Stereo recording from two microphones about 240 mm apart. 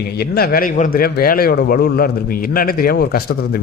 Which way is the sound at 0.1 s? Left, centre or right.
Left.